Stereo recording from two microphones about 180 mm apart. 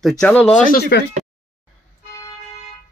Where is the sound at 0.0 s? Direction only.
5° left (ahead or behind).